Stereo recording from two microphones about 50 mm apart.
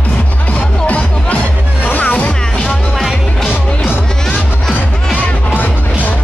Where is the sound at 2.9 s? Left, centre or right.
Centre.